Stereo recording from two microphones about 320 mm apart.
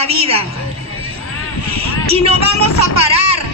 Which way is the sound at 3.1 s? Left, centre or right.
Centre.